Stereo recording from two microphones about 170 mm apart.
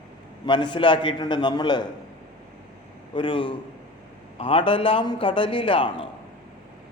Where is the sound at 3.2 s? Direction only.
30° left (ahead or behind).